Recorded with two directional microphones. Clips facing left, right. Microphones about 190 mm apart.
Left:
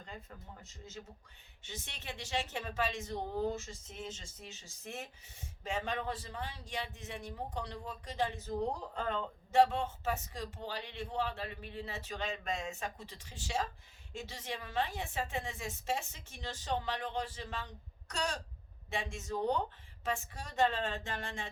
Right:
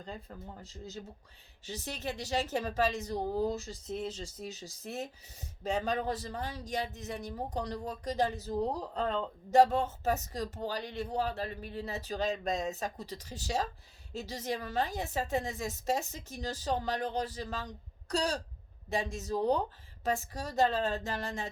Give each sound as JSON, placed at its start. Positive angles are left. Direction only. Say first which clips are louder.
{"t": 0.0, "sound": "speech", "louder": "right 6 dB", "side_deg": -35}